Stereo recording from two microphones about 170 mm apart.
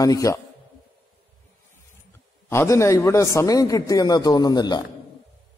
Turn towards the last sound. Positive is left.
turn(degrees=25)  # may be behind; listen again after turning